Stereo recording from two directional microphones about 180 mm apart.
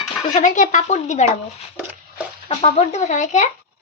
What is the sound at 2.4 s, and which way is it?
Speech, 40° left (ahead or behind).